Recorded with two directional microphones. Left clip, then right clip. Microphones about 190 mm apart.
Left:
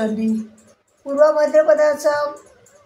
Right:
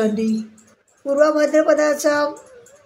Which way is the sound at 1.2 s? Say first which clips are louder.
Left 2 dB; 60° right (ahead or behind).